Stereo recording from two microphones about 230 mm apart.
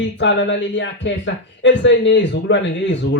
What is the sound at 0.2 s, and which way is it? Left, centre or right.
Speech, left.